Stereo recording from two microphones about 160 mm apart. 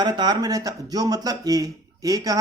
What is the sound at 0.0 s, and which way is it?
Speech, 25° right (ahead or behind).